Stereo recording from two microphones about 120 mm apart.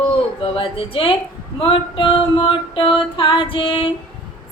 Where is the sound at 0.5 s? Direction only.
50° left (ahead or behind).